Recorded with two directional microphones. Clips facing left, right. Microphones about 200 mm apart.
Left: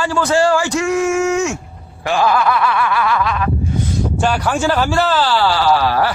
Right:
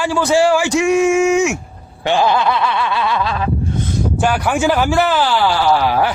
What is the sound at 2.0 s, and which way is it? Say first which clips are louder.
Speech: right 1 dB; 25° right (ahead or behind).